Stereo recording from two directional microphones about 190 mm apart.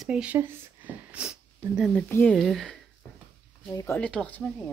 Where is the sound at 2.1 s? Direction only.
10° left (ahead or behind).